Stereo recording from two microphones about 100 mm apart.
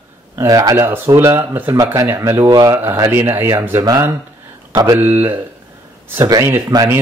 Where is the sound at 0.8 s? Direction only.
25° right (ahead or behind).